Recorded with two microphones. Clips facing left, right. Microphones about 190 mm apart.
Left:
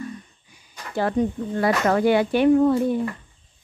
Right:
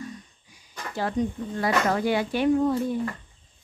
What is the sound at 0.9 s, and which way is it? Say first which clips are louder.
Speech: left 5 dB; 60° left (ahead or behind).